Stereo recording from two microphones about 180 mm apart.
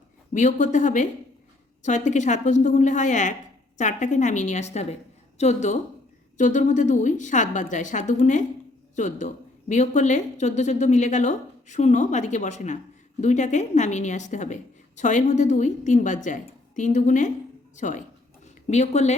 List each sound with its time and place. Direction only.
0.3 s a woman's voice: 45° left (ahead or behind)